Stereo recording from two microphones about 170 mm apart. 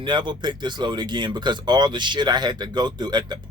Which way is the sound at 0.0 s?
25° right (ahead or behind).